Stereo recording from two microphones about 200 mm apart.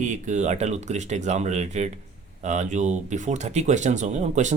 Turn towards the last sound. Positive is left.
turn(degrees=-35)  # may be behind; listen again after turning